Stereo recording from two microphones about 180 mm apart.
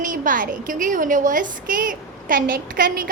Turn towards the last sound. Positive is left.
turn(degrees=-50)  # may be behind; listen again after turning